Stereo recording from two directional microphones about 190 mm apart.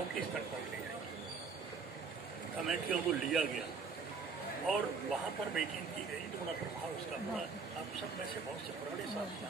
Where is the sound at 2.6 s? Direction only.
Centre (ahead or behind).